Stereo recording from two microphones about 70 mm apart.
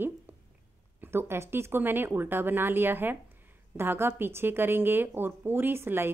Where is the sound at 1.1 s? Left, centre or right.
Right.